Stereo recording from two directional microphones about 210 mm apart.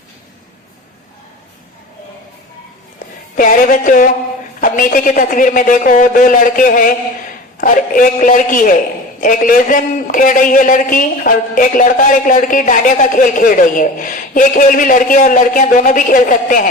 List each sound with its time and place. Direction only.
3.3 s music: 40° left (ahead or behind)
4.6 s a man's voice: 40° left (ahead or behind)